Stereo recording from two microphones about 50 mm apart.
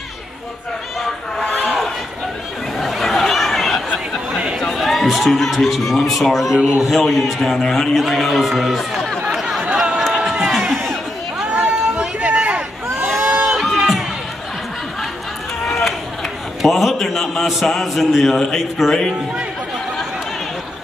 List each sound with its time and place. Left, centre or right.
1.5 s a sound: centre
2.8 s chatter: centre
4.6 s a man's voice: centre
7.4 s a man's voice: centre
7.9 s speech: centre
9.3 s a sound: centre
11.4 s a sound: right
13.5 s music: centre
16.6 s a man's voice: centre